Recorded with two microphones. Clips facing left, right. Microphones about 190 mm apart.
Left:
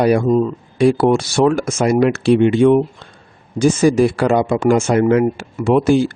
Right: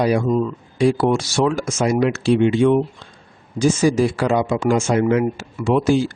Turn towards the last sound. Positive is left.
turn(degrees=55)  # may be behind; listen again after turning